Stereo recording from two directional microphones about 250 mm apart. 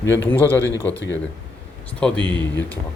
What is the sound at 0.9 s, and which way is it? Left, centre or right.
Speech, left.